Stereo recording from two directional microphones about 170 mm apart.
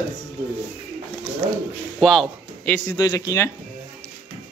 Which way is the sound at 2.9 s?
20° left (ahead or behind).